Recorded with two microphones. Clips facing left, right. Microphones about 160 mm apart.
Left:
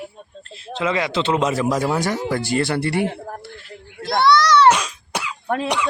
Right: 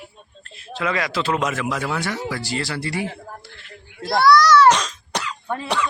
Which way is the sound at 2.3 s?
50° left (ahead or behind).